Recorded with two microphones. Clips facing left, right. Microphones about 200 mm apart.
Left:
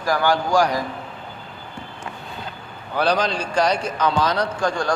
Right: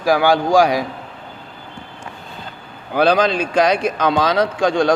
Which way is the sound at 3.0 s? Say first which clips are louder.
Right 6 dB; 90° right.